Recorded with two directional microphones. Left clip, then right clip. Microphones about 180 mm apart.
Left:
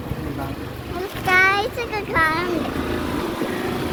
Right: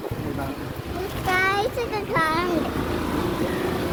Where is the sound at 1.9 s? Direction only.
20° right (ahead or behind).